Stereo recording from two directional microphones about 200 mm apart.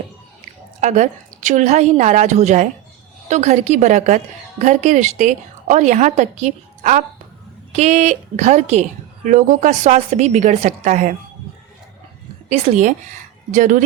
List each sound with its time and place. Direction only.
0.8 s a woman's voice: 35° right (ahead or behind)
12.5 s a woman's voice: 35° right (ahead or behind)